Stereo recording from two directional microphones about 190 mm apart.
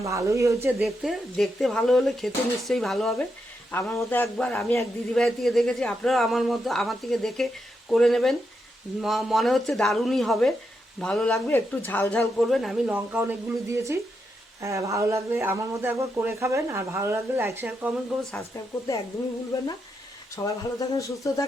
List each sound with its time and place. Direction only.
0.0 s speech: 15° right (ahead or behind)
0.8 s speech: centre (ahead or behind)
3.7 s a man's voice: 10° left (ahead or behind)
5.1 s speech: centre (ahead or behind)
20.3 s a man's voice: 15° left (ahead or behind)